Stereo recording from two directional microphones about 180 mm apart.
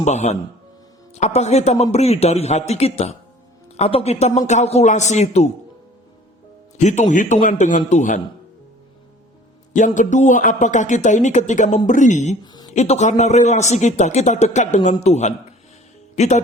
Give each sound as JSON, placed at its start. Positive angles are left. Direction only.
{"t": 0.0, "sound": "a man's voice", "side_deg": 40}
{"t": 6.7, "sound": "a man's voice", "side_deg": 40}
{"t": 9.7, "sound": "a man's voice", "side_deg": 45}